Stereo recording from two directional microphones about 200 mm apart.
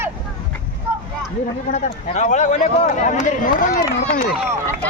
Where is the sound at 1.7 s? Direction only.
35° left (ahead or behind).